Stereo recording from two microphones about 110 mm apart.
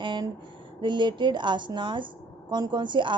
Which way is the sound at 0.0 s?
45° right (ahead or behind).